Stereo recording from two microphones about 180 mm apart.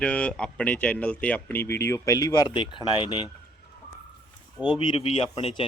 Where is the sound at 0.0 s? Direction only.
5° left (ahead or behind); by 3.2 s 25° left (ahead or behind).